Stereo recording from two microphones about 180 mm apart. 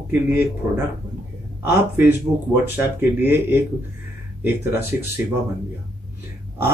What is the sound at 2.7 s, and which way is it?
Speech, 10° right (ahead or behind).